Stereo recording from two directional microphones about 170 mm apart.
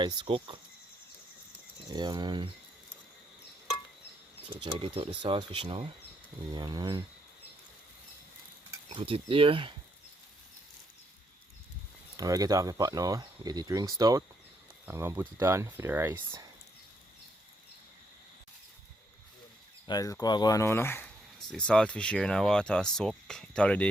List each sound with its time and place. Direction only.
0.0 s speech: 30° right (ahead or behind)
1.9 s speech: 25° right (ahead or behind)
4.6 s speech: 30° right (ahead or behind)
8.9 s speech: 35° right (ahead or behind)
12.1 s speech: 20° right (ahead or behind)
19.9 s speech: 20° left (ahead or behind)